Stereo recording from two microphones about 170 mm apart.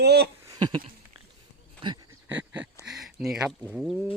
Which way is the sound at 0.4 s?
25° right (ahead or behind).